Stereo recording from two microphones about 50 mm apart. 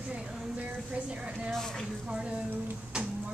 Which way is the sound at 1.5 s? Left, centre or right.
Centre.